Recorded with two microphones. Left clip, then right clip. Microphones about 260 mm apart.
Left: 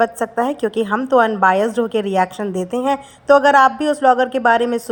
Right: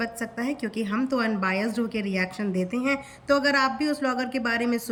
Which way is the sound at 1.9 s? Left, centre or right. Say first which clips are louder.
Left 11 dB; right.